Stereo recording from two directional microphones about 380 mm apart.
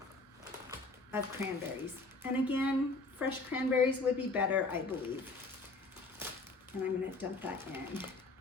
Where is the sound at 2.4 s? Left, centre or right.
Centre.